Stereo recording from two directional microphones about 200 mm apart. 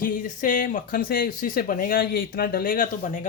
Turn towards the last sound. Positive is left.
turn(degrees=40)  # may be behind; listen again after turning